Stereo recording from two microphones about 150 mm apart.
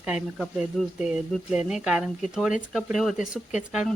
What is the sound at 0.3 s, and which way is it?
Speech, centre (ahead or behind).